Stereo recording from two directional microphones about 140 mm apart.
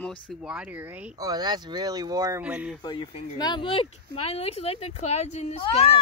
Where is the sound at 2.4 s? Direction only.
10° right (ahead or behind).